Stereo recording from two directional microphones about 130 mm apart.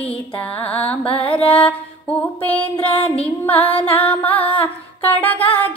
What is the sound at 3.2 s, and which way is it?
Music, 15° left (ahead or behind).